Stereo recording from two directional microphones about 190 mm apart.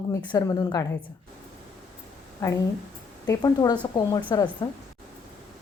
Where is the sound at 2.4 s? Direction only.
15° left (ahead or behind).